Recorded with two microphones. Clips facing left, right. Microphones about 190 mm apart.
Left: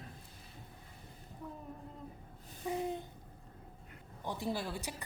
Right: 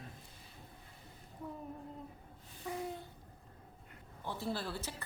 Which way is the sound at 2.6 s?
20° left (ahead or behind).